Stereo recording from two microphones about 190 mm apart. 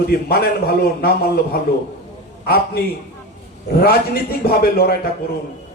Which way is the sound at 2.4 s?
55° left (ahead or behind).